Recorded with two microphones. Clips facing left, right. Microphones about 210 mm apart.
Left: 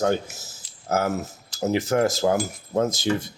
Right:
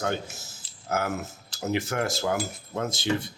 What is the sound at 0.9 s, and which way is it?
Speech, 45° left (ahead or behind).